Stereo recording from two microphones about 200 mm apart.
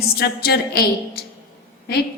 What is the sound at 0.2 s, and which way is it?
Music, 50° left (ahead or behind).